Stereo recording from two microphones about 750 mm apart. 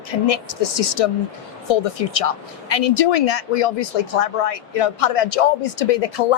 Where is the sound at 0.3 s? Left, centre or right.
Left.